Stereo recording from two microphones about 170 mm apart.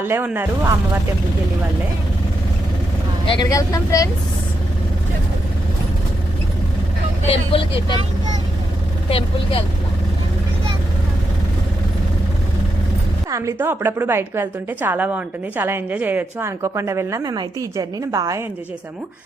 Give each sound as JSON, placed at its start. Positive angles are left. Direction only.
{"t": 0.0, "sound": "a woman's voice", "side_deg": -15}
{"t": 3.2, "sound": "speech", "side_deg": 25}
{"t": 7.3, "sound": "speech", "side_deg": 30}
{"t": 9.0, "sound": "speech", "side_deg": 35}
{"t": 13.3, "sound": "a woman's voice", "side_deg": -15}